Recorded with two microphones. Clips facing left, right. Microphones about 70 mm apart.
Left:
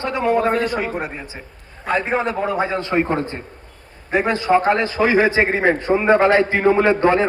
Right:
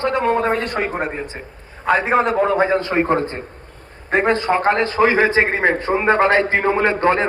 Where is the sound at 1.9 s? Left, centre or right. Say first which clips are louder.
Right 4 dB; right.